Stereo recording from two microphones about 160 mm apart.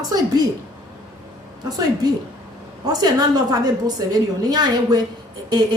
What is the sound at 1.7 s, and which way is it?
A woman's voice, 25° right (ahead or behind).